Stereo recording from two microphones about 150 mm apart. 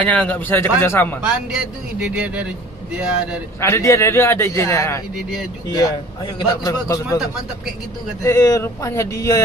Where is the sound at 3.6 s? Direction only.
20° left (ahead or behind).